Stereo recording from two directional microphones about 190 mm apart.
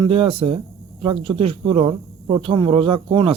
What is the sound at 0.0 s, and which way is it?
Speech, 30° right (ahead or behind).